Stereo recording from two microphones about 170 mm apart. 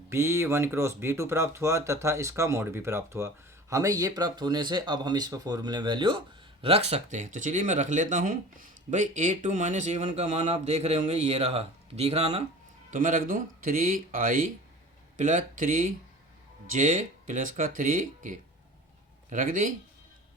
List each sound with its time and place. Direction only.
0.1 s speech: 15° right (ahead or behind); by 12.4 s 40° right (ahead or behind)
12.9 s speech: 50° right (ahead or behind)